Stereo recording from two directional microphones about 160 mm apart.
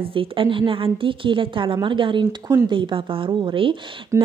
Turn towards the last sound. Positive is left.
turn(degrees=-20)  # may be behind; listen again after turning